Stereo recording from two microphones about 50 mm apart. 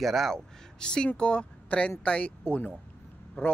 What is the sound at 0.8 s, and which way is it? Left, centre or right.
Speech, centre.